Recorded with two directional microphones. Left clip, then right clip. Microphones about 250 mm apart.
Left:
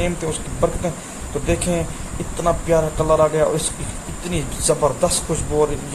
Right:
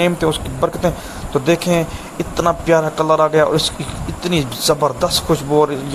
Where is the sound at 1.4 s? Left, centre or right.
Centre.